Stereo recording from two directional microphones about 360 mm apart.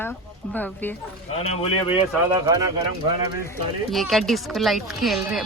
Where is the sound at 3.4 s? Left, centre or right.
Centre.